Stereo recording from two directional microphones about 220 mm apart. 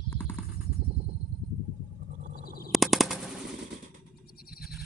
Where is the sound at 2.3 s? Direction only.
40° left (ahead or behind).